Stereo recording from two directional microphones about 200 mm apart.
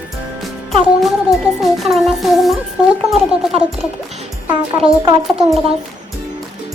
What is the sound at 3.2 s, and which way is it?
Speech, 30° right (ahead or behind).